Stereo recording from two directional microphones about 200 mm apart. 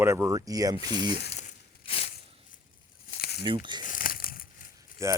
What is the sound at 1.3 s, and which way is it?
Crushing, 30° left (ahead or behind).